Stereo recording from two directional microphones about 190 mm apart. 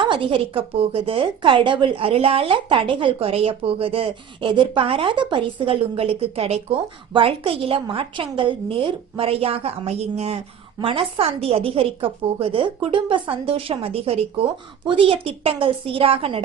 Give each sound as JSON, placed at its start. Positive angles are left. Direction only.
{"t": 0.0, "sound": "a woman's voice", "side_deg": -25}